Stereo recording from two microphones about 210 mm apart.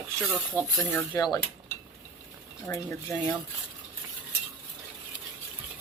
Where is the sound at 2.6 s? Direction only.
10° left (ahead or behind).